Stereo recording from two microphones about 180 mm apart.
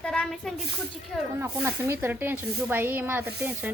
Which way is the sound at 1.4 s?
15° right (ahead or behind).